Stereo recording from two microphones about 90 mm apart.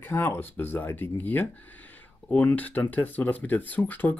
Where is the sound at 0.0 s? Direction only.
25° left (ahead or behind).